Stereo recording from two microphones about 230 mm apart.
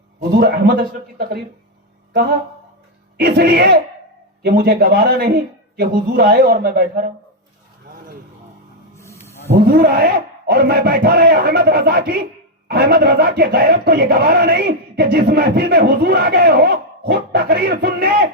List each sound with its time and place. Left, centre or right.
0.2 s speech: right
3.2 s speech: right
9.0 s snake: centre
9.6 s speech: right